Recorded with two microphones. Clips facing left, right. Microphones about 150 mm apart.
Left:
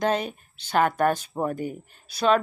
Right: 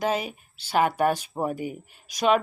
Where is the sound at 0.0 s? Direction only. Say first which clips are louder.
Left 2 dB; 5° right (ahead or behind).